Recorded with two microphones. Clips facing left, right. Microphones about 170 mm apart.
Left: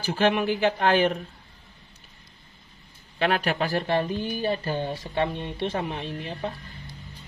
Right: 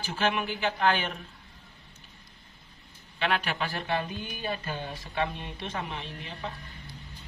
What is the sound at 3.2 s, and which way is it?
Speech, 40° left (ahead or behind).